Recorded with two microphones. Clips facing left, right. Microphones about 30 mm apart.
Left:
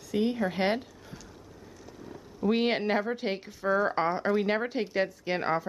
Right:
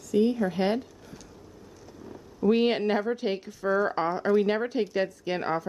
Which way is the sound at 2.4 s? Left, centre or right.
Centre.